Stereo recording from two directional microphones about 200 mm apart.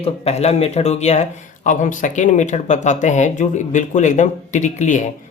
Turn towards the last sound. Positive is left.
turn(degrees=35)  # may be behind; listen again after turning